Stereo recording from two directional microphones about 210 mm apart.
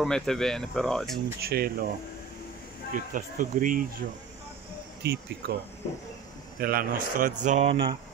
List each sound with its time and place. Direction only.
0.0 s speech: centre (ahead or behind)
1.4 s speech: 45° right (ahead or behind)
2.9 s speech: 40° right (ahead or behind)
5.0 s speech: 50° right (ahead or behind)
6.6 s speech: 45° right (ahead or behind)
7.7 s speech: 25° right (ahead or behind)